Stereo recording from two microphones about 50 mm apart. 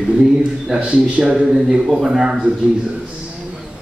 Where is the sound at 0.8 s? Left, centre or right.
Centre.